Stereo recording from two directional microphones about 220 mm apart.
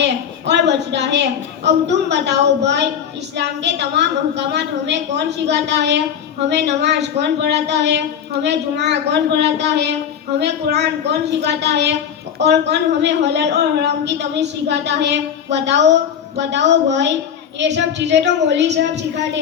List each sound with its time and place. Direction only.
0.0 s a woman's voice: 50° right (ahead or behind)